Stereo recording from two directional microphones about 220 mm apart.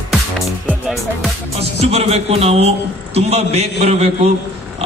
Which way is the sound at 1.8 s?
25° right (ahead or behind).